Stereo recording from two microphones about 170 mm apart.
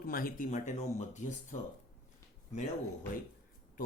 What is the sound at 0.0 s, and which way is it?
Speech, 55° left (ahead or behind).